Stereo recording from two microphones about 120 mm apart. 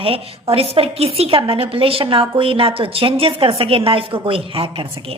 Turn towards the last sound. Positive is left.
turn(degrees=-50)  # may be behind; listen again after turning